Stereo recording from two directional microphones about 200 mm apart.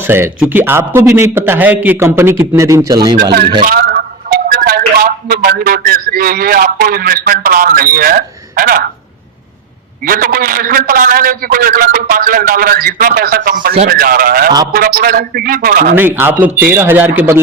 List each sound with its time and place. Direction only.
0.1 s a man's voice: 5° right (ahead or behind)
3.6 s a man's voice: 45° right (ahead or behind)
10.1 s a man's voice: 45° right (ahead or behind)
16.0 s a man's voice: 10° right (ahead or behind)